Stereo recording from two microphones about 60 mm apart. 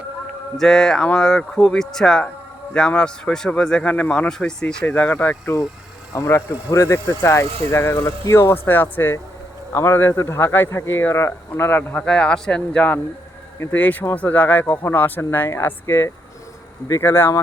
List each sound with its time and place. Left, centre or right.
0.5 s speech: centre; by 4.3 s left
4.3 s speech: centre
4.9 s speech: left
6.1 s speech: left
9.7 s speech: left
11.9 s speech: centre
13.7 s speech: left